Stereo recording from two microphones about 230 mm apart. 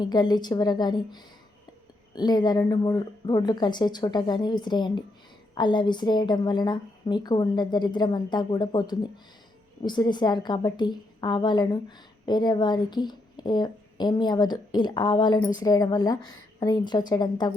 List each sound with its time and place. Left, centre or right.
0.0 s a woman's voice: centre